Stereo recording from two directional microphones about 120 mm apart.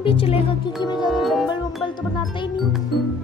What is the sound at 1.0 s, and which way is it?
Music, centre (ahead or behind).